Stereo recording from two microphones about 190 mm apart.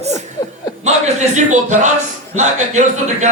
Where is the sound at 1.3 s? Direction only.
40° right (ahead or behind).